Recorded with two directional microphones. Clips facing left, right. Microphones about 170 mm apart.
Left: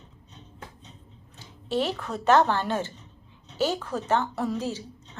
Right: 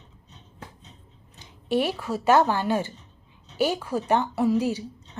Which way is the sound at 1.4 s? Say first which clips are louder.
Right 3 dB; 15° right (ahead or behind).